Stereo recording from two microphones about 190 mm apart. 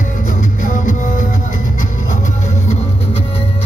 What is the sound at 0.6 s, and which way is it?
Music, 45° left (ahead or behind).